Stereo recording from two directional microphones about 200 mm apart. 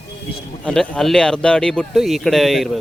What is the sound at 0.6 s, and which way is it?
Speech, 5° left (ahead or behind).